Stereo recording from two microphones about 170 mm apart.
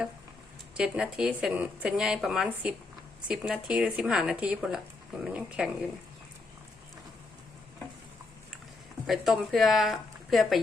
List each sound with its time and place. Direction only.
0.8 s speech: 5° right (ahead or behind)
9.0 s speech: centre (ahead or behind)